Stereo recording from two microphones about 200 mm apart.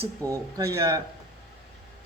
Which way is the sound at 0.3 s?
15° right (ahead or behind).